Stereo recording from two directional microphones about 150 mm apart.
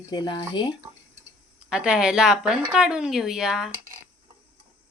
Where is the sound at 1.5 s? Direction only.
5° right (ahead or behind).